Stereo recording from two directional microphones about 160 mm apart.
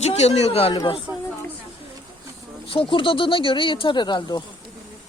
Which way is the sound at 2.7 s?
35° left (ahead or behind).